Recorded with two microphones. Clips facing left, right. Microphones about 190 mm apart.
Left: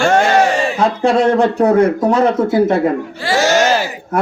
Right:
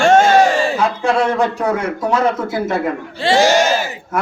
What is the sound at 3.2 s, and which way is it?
Speech, 25° right (ahead or behind).